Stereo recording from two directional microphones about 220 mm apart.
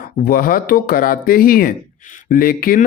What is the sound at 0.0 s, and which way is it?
Speech, 40° left (ahead or behind).